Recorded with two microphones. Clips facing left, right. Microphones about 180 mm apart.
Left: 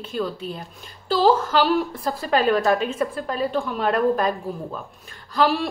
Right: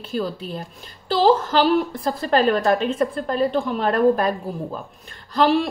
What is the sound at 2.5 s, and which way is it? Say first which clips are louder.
A woman's voice: right 1 dB; 5° left (ahead or behind).